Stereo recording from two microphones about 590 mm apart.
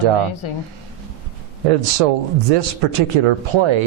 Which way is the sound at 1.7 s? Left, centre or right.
Right.